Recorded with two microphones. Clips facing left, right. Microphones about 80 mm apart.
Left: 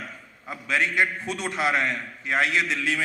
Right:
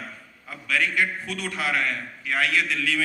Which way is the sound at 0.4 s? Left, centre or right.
Left.